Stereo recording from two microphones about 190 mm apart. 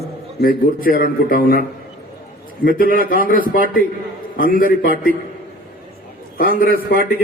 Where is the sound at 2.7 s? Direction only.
50° left (ahead or behind).